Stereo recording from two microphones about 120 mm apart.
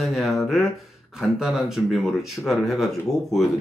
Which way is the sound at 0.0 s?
Centre (ahead or behind).